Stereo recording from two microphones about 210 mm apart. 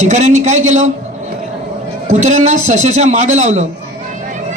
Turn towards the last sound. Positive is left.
turn(degrees=-35)  # may be behind; listen again after turning